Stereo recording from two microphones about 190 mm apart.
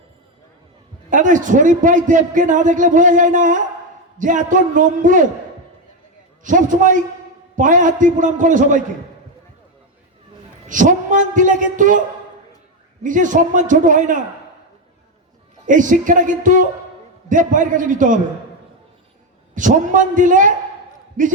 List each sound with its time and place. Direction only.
1.1 s a man's voice: 40° right (ahead or behind)
6.4 s a man's voice: 45° right (ahead or behind)
10.7 s a man's voice: 45° right (ahead or behind)
15.6 s a man's voice: 45° right (ahead or behind)
19.5 s a man's voice: 40° right (ahead or behind)